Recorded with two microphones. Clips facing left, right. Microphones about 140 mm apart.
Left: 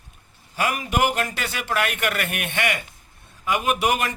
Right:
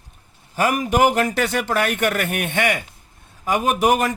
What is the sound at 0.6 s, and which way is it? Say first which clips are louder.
Speech: right 5 dB; 45° right (ahead or behind).